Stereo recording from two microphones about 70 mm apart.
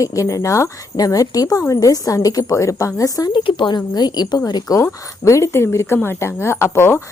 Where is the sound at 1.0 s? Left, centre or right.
Left.